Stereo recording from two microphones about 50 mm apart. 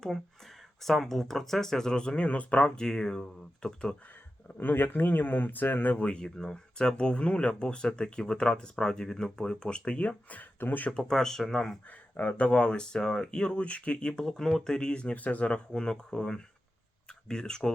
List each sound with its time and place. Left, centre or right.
1.0 s speech: centre; by 2.8 s left
2.8 s speech: centre
4.6 s speech: left
6.0 s speech: left
10.9 s speech: centre
11.9 s speech: left
14.3 s speech: centre; by 15.6 s left
15.7 s speech: centre